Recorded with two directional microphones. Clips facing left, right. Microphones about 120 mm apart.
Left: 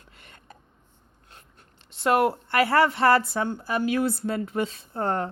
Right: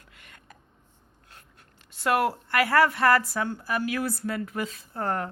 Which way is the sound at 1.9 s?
25° left (ahead or behind).